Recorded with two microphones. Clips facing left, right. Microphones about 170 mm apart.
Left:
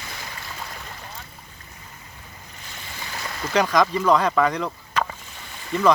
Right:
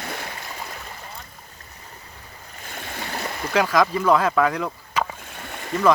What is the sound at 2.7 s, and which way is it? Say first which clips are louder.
Stream: right 6 dB; 60° right (ahead or behind).